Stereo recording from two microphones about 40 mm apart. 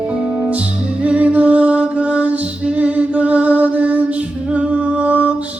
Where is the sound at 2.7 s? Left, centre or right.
Right.